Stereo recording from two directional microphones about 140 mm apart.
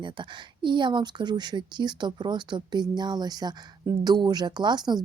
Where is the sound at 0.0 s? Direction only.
35° right (ahead or behind).